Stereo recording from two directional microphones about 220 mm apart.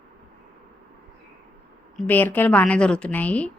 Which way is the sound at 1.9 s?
10° left (ahead or behind).